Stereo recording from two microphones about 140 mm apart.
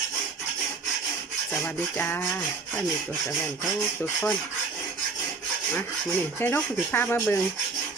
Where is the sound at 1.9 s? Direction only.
15° left (ahead or behind).